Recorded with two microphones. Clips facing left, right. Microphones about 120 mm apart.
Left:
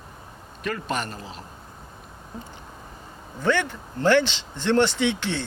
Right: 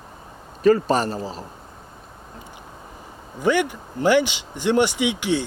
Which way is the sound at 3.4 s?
10° right (ahead or behind).